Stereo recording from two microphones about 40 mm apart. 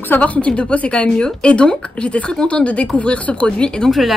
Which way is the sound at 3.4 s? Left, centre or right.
Left.